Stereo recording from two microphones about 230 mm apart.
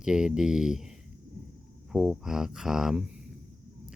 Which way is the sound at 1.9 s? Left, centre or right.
Centre.